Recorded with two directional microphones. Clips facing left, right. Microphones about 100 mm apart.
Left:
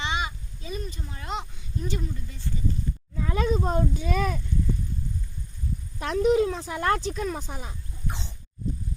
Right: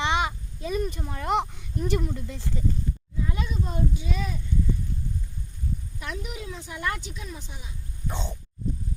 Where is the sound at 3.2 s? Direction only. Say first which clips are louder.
Left 8 dB; 70° left (ahead or behind).